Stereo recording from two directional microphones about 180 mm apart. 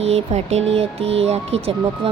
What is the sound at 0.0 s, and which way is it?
Speech, 35° right (ahead or behind).